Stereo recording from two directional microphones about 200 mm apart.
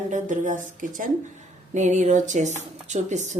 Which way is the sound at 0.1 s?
40° right (ahead or behind).